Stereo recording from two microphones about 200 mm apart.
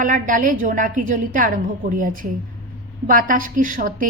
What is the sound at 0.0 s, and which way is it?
A woman's voice, 40° right (ahead or behind).